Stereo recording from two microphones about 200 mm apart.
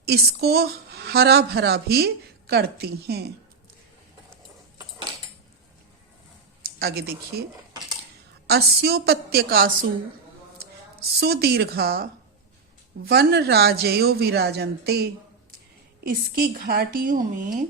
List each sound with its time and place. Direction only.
0.0 s a woman's voice: 55° right (ahead or behind)
6.6 s speech: 50° right (ahead or behind)
8.4 s a woman's voice: 50° right (ahead or behind)
13.1 s a woman's voice: 50° right (ahead or behind)